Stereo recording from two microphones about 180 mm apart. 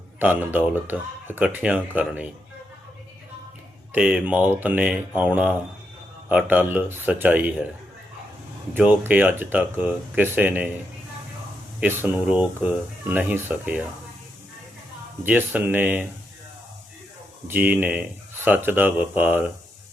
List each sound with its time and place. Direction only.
0.2 s speech: 10° right (ahead or behind)
3.9 s speech: 5° right (ahead or behind)
8.7 s speech: 10° right (ahead or behind)
11.8 s speech: 10° right (ahead or behind)
15.2 s speech: 10° right (ahead or behind)
17.5 s speech: 10° right (ahead or behind)